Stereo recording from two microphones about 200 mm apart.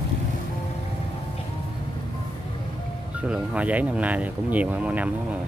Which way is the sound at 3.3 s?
5° right (ahead or behind).